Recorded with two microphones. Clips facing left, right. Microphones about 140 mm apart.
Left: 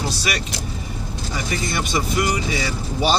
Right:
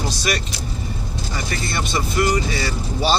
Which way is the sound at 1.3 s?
15° left (ahead or behind).